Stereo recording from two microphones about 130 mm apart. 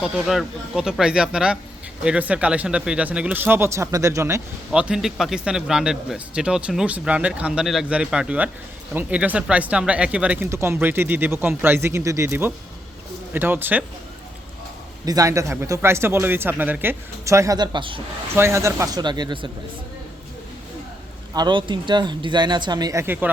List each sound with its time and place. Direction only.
0.0 s speech: centre (ahead or behind); by 4.4 s 20° right (ahead or behind)
4.7 s speech: 5° right (ahead or behind)
15.0 s speech: 25° right (ahead or behind)
18.3 s speech: 20° right (ahead or behind)
21.3 s speech: 35° right (ahead or behind); by 23.3 s 20° right (ahead or behind)